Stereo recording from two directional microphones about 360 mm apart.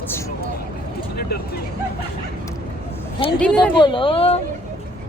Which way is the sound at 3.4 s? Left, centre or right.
Centre.